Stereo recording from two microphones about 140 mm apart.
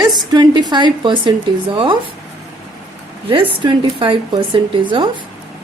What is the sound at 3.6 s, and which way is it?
A woman's voice, 40° right (ahead or behind).